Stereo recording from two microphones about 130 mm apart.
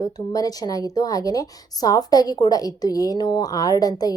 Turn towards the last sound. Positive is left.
turn(degrees=30)  # may be behind; listen again after turning